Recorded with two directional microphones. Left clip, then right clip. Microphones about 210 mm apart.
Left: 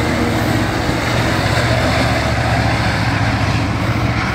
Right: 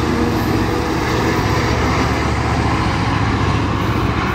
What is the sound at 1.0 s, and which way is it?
Vehicle, 35° left (ahead or behind).